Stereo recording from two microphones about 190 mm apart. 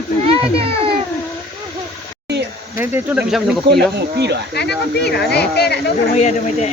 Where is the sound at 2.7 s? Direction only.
10° right (ahead or behind).